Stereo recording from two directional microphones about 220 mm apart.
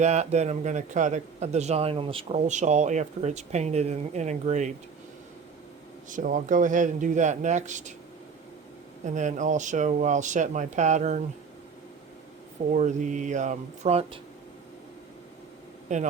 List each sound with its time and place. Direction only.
0.0 s a man's voice: 30° right (ahead or behind)
6.1 s a man's voice: 35° right (ahead or behind)
9.0 s a man's voice: 35° right (ahead or behind)
12.7 s a man's voice: 35° right (ahead or behind)